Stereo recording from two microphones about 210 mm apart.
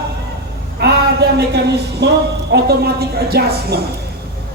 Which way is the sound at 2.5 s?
50° right (ahead or behind).